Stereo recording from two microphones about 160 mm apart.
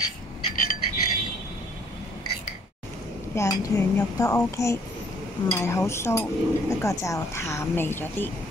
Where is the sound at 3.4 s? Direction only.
20° left (ahead or behind).